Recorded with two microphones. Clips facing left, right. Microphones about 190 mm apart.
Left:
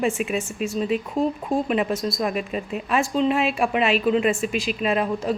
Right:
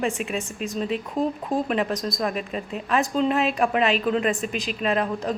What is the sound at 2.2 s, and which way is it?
A woman's voice, 10° left (ahead or behind).